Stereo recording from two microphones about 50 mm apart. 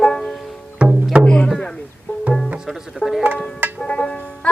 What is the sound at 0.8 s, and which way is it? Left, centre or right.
Music, right.